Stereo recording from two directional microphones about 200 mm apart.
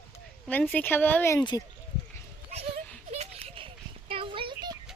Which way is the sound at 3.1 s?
30° right (ahead or behind).